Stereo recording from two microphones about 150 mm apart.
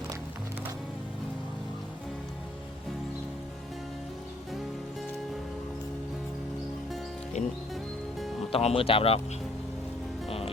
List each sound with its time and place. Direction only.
7.4 s music: 50° left (ahead or behind)
8.5 s speech: 40° left (ahead or behind)
10.2 s music: 40° left (ahead or behind)